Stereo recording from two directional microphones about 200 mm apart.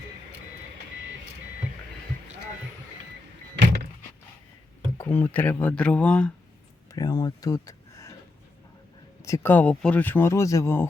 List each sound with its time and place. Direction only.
4.9 s speech: 10° left (ahead or behind)
6.9 s speech: 20° left (ahead or behind)
9.2 s speech: 15° left (ahead or behind)